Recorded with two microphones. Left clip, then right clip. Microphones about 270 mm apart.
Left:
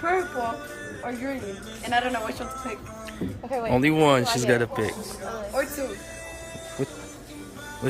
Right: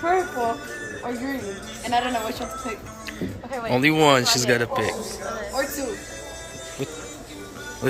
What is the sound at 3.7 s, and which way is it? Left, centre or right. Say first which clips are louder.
Speech: right 3 dB; centre.